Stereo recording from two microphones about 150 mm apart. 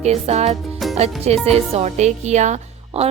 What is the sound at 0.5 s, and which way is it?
Music, centre (ahead or behind).